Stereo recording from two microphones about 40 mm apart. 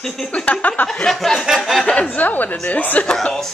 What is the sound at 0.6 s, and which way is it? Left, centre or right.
Speech, left.